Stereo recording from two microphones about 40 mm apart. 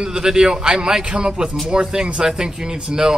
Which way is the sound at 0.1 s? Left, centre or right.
Centre.